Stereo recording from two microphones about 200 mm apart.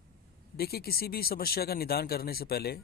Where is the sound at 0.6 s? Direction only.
50° left (ahead or behind).